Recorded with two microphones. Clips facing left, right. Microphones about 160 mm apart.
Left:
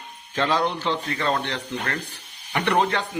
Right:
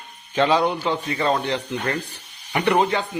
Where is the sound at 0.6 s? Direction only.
10° right (ahead or behind).